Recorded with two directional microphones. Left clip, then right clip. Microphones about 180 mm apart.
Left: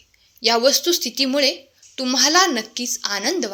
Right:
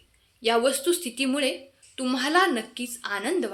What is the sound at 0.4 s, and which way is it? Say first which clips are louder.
A woman's voice: left 6 dB; 30° left (ahead or behind).